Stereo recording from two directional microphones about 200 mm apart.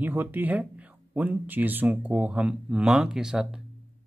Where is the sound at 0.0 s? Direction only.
10° right (ahead or behind).